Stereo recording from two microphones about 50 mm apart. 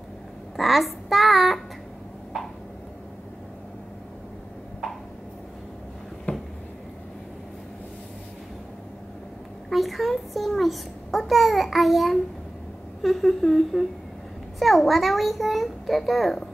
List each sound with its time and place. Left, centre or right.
0.6 s a child's voice: centre
6.3 s a sound: left
9.7 s a child's voice: centre